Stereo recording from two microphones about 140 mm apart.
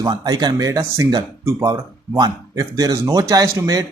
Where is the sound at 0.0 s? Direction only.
30° right (ahead or behind).